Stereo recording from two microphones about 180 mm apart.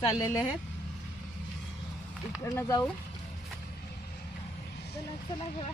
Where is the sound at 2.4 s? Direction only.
15° left (ahead or behind).